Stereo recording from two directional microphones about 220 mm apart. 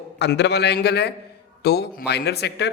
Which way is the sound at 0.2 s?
50° left (ahead or behind).